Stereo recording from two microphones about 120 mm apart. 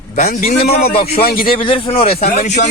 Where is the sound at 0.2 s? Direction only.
65° left (ahead or behind).